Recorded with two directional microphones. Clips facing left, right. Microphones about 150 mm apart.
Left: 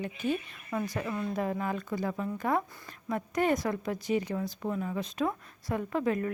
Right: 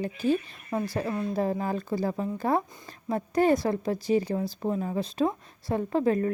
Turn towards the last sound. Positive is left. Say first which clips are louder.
# right 5 dB
turn(degrees=-35)  # may be behind; listen again after turning